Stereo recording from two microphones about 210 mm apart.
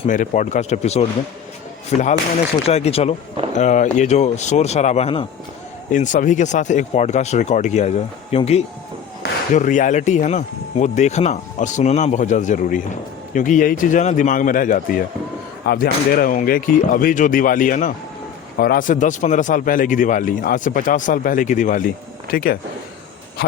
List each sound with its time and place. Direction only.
0.0 s speech: 35° left (ahead or behind)